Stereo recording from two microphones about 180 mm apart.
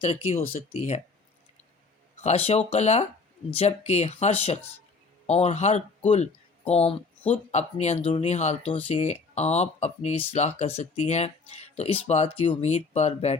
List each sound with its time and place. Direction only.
0.0 s speech: 30° left (ahead or behind)
2.2 s speech: 35° left (ahead or behind)